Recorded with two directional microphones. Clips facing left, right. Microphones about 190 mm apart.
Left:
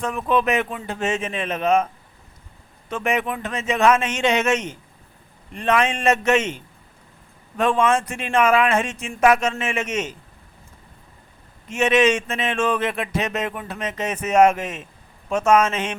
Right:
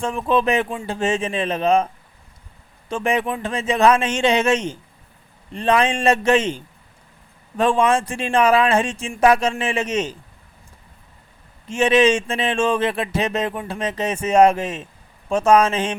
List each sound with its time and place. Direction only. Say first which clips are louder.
0.0 s speech: right 2 dB; 30° right (ahead or behind)
2.9 s speech: right 2 dB; 30° right (ahead or behind)
11.7 s speech: right 2 dB; 30° right (ahead or behind)